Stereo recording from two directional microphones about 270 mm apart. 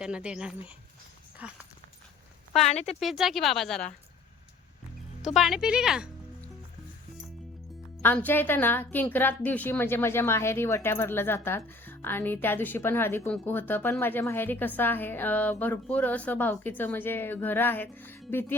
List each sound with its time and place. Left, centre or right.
0.0 s speech: centre
2.6 s speech: left
3.0 s speech: centre
5.2 s speech: centre
8.0 s speech: centre